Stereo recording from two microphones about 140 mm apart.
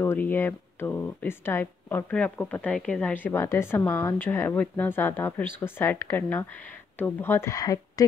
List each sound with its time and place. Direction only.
0.0 s speech: 15° left (ahead or behind)